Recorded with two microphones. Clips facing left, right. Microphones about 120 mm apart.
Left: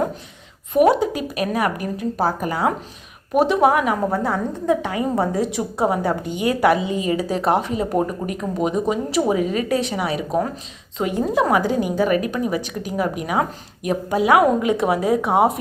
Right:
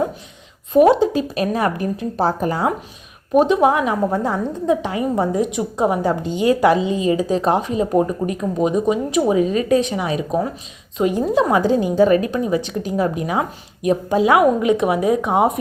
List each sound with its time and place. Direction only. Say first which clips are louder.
0.7 s a woman's voice: right 3 dB; 25° right (ahead or behind)